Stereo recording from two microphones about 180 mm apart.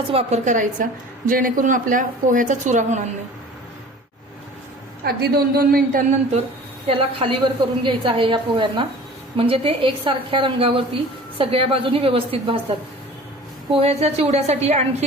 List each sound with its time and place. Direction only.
0.1 s a woman's voice: 35° right (ahead or behind)
5.0 s a man's voice: 55° right (ahead or behind)
6.8 s a woman's voice: 30° right (ahead or behind)